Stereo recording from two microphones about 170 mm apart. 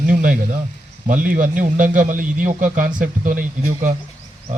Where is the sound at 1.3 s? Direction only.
50° right (ahead or behind).